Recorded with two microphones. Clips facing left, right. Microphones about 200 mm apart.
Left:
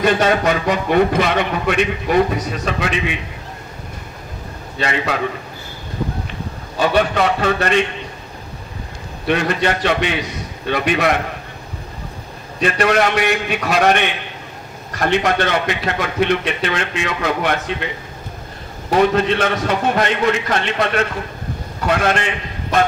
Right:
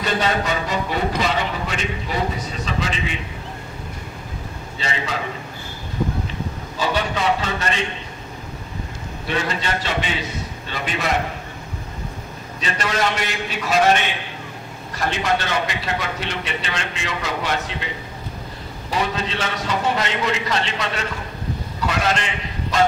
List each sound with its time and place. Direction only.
0.0 s a man's voice: 60° left (ahead or behind)
4.7 s a man's voice: 65° left (ahead or behind)
6.8 s a man's voice: 60° left (ahead or behind)
9.3 s a man's voice: 60° left (ahead or behind)
12.5 s a man's voice: 60° left (ahead or behind)
18.9 s a man's voice: 55° left (ahead or behind)